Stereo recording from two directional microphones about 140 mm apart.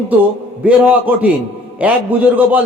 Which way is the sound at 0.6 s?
10° right (ahead or behind).